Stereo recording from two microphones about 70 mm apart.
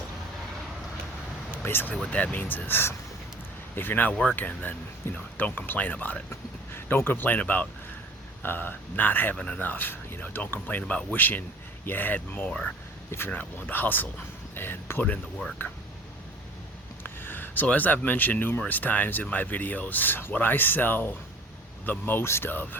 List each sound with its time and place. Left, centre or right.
1.6 s speech: left
2.0 s speech: left
13.1 s speech: left
13.3 s speech: left
17.0 s speech: left